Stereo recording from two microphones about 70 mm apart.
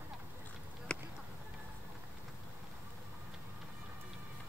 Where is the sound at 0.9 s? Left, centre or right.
Centre.